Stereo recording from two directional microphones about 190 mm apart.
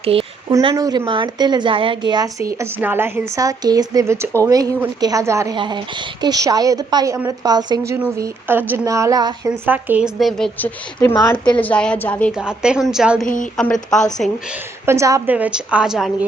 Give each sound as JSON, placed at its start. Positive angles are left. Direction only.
{"t": 0.0, "sound": "speech", "side_deg": -30}
{"t": 0.5, "sound": "a woman's voice", "side_deg": -20}
{"t": 9.6, "sound": "a woman's voice", "side_deg": -10}
{"t": 11.1, "sound": "a woman's voice", "side_deg": 25}
{"t": 11.6, "sound": "a woman's voice", "side_deg": 5}
{"t": 12.3, "sound": "a woman's voice", "side_deg": -5}
{"t": 13.2, "sound": "a woman's voice", "side_deg": 45}
{"t": 13.6, "sound": "a woman's voice", "side_deg": 5}
{"t": 14.8, "sound": "a woman's voice", "side_deg": -15}